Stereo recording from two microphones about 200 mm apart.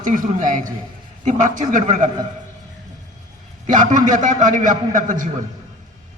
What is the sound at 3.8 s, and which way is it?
A man's voice, 40° right (ahead or behind).